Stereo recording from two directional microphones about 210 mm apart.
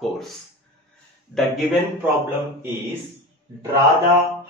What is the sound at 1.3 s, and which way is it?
Speech, 5° right (ahead or behind).